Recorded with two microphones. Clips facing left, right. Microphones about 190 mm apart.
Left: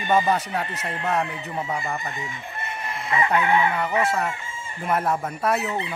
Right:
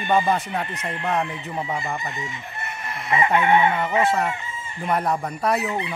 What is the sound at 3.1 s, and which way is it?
Chicken, 25° right (ahead or behind).